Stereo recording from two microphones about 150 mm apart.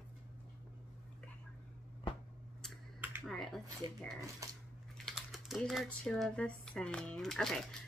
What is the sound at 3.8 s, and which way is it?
Speech, 30° right (ahead or behind).